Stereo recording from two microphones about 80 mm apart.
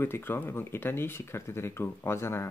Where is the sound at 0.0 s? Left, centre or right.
Left.